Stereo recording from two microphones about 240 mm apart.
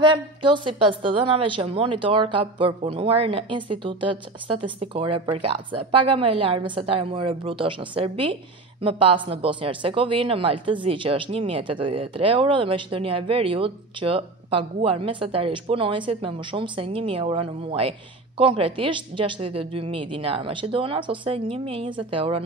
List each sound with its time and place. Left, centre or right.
0.0 s speech: centre